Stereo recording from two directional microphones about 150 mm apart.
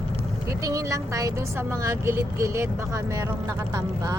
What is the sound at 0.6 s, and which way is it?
Speech, 20° right (ahead or behind).